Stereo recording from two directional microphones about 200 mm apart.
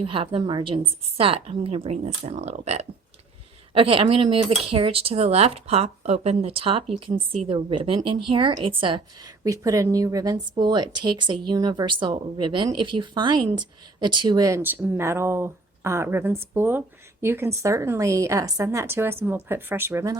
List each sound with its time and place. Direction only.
0.0 s speech: 25° right (ahead or behind)